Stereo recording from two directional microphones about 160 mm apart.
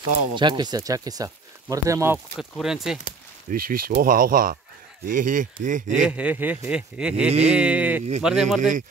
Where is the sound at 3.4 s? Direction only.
65° right (ahead or behind).